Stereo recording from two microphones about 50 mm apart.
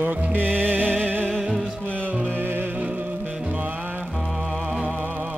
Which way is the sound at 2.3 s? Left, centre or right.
Right.